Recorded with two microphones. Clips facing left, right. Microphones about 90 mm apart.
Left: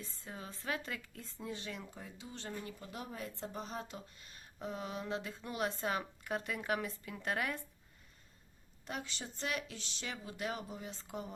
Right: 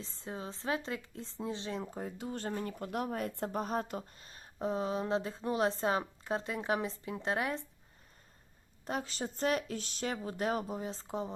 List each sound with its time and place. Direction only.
0.0 s speech: 25° right (ahead or behind)
8.9 s speech: 40° right (ahead or behind)